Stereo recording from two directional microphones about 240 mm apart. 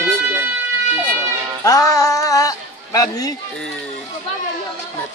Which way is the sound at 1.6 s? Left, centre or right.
Centre.